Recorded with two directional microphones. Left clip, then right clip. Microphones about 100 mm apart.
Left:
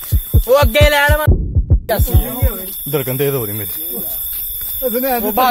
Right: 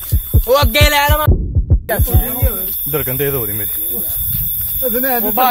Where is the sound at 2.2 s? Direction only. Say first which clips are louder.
Even; 40° right (ahead or behind).